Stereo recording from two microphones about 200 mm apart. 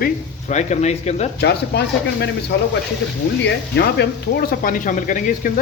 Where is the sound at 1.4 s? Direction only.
55° left (ahead or behind).